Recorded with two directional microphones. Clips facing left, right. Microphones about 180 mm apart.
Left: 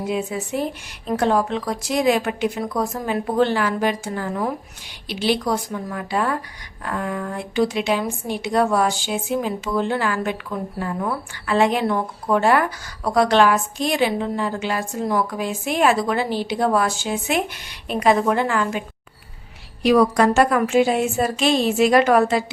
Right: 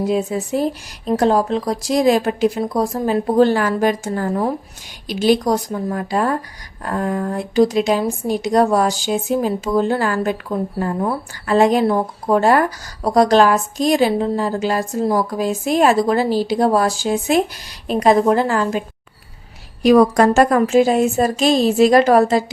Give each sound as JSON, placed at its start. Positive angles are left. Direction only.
{"t": 0.0, "sound": "speech", "side_deg": -35}
{"t": 19.8, "sound": "a woman's voice", "side_deg": -45}